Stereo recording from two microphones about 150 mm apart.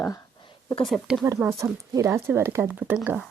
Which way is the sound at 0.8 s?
Centre (ahead or behind).